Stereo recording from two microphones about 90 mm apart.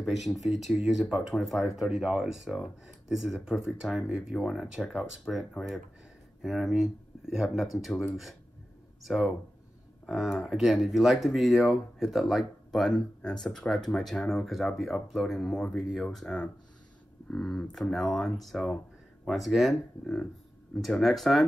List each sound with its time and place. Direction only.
0.0 s speech: centre (ahead or behind)